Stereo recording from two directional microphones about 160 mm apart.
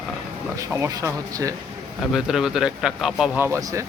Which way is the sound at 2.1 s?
5° right (ahead or behind).